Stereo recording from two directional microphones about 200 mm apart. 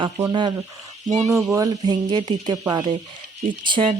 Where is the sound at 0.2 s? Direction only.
20° right (ahead or behind).